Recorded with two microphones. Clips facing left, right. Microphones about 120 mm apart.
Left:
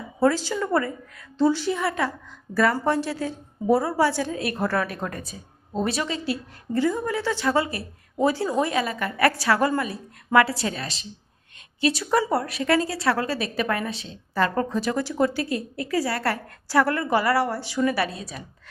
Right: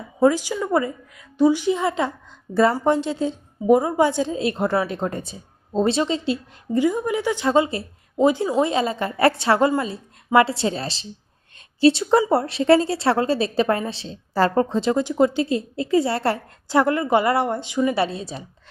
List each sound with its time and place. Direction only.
0.2 s a woman's voice: 15° right (ahead or behind)